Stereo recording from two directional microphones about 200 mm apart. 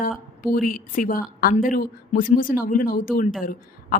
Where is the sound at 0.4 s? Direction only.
45° left (ahead or behind).